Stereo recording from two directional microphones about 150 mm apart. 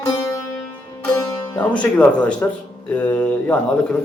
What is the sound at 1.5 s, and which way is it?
Speech, 10° left (ahead or behind).